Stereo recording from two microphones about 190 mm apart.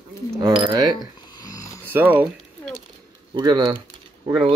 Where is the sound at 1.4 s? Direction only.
20° left (ahead or behind).